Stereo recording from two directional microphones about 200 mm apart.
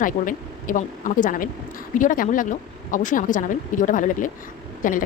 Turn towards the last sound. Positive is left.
turn(degrees=40)  # may be behind; listen again after turning